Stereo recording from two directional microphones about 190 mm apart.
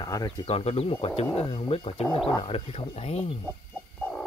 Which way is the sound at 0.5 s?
30° left (ahead or behind).